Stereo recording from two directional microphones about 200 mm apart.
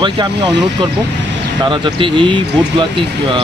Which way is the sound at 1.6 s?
25° right (ahead or behind).